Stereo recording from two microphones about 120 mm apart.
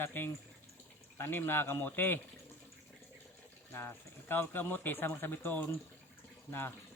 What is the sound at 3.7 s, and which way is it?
A man's voice, 20° left (ahead or behind).